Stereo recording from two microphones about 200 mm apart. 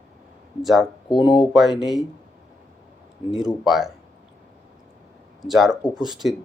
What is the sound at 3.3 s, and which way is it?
Speech, centre (ahead or behind).